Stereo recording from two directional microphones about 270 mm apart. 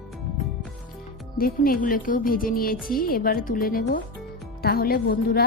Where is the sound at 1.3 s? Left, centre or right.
Left.